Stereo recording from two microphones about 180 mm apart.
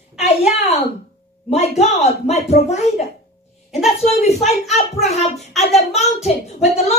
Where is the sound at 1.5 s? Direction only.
35° left (ahead or behind).